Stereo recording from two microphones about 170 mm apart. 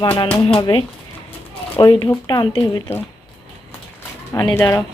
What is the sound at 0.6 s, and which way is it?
A woman's voice, 30° left (ahead or behind).